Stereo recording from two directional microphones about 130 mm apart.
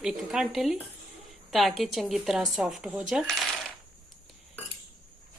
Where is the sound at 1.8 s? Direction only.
Centre (ahead or behind).